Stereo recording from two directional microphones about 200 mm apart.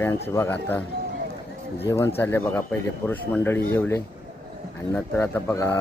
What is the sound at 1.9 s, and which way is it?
Speech, 15° left (ahead or behind).